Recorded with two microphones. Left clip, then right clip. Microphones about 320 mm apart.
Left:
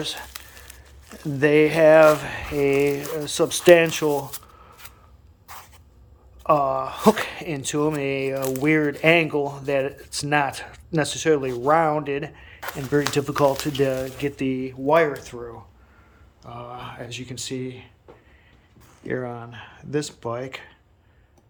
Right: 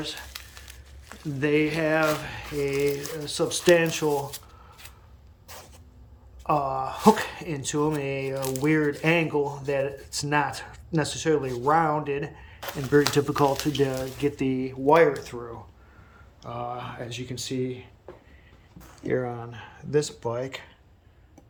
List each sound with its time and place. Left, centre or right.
0.0 s whispering: centre
1.2 s speech: centre
5.5 s a sound: centre
6.4 s speech: centre
13.3 s speech: centre
13.8 s speech: centre
19.0 s speech: centre